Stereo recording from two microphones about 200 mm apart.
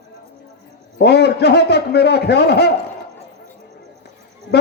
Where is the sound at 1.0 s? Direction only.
55° left (ahead or behind).